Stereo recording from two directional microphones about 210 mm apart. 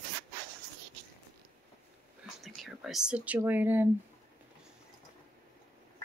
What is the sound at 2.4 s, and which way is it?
Speech, centre (ahead or behind).